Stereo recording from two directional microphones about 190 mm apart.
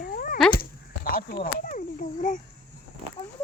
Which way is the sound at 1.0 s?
50° left (ahead or behind).